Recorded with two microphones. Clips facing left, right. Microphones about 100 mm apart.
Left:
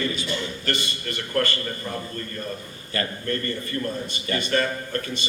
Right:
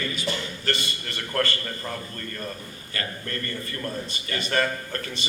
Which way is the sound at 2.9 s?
35° left (ahead or behind).